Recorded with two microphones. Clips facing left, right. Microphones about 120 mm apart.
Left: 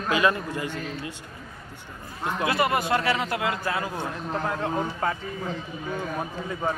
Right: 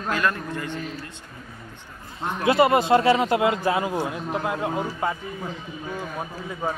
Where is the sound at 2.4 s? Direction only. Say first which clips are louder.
Right 6 dB; 25° right (ahead or behind); by 5.1 s 10° right (ahead or behind).